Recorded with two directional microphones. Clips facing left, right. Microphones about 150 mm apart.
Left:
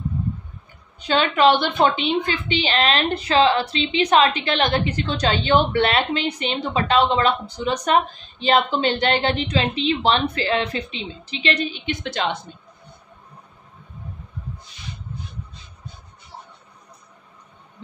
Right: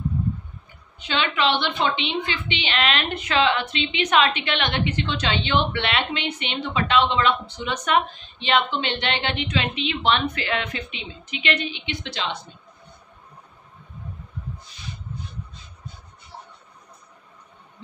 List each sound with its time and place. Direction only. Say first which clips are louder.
0.9 s a woman's voice: left 5 dB; 40° left (ahead or behind)